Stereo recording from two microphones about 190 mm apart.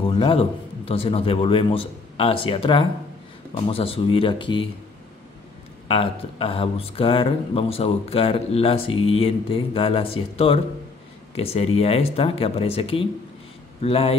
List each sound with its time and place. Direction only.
0.0 s a man's voice: 25° left (ahead or behind)
5.9 s speech: 30° left (ahead or behind)